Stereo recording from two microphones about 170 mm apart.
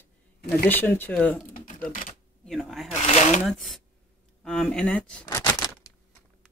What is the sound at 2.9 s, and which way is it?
Speech, 40° left (ahead or behind).